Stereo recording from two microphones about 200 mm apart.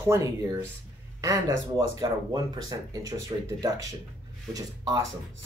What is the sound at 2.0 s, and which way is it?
Speech, 20° right (ahead or behind).